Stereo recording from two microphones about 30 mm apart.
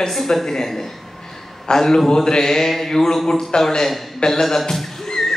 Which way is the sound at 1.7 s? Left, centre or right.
Left.